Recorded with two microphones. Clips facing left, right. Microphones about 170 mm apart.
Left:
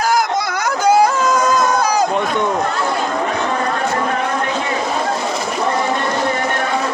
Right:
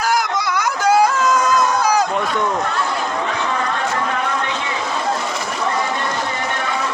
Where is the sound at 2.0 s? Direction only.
20° left (ahead or behind).